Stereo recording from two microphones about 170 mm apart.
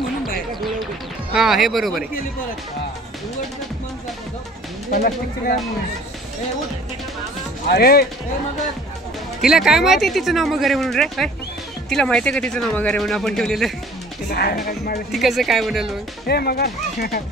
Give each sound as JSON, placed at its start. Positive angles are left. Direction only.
{"t": 1.3, "sound": "speech", "side_deg": 0}
{"t": 4.9, "sound": "a woman's voice", "side_deg": 55}
{"t": 7.7, "sound": "speech", "side_deg": 65}
{"t": 9.4, "sound": "speech", "side_deg": 0}
{"t": 14.3, "sound": "a woman's voice", "side_deg": 65}
{"t": 15.0, "sound": "speech", "side_deg": 0}
{"t": 16.3, "sound": "speech", "side_deg": 65}